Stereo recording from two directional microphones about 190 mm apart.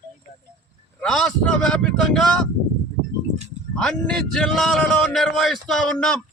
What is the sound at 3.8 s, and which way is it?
Speech, 5° left (ahead or behind).